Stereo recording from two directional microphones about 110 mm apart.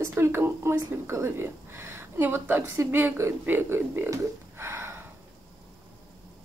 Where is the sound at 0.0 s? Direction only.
25° right (ahead or behind).